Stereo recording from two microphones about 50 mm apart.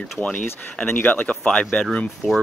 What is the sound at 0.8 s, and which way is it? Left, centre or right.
Speech, left.